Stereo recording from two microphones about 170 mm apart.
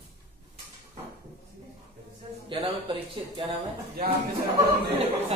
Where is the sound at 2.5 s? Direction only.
30° right (ahead or behind).